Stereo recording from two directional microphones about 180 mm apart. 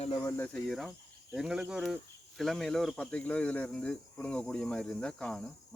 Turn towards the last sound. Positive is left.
turn(degrees=5)  # may be behind; listen again after turning